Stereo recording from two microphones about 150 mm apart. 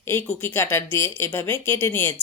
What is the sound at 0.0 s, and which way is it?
Speech, 15° left (ahead or behind).